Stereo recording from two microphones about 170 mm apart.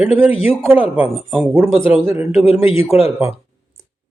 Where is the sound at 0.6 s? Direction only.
10° right (ahead or behind).